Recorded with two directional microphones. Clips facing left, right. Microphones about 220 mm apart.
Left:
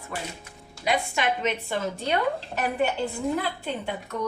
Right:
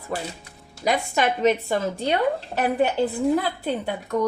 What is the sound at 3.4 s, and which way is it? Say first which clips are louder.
Speech: right 4 dB; 40° right (ahead or behind).